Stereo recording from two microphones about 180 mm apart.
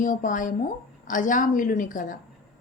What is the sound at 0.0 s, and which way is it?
A woman's voice, 45° left (ahead or behind).